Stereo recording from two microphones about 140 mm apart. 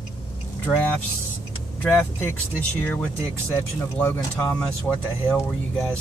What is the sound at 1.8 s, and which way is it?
Speech, 15° left (ahead or behind).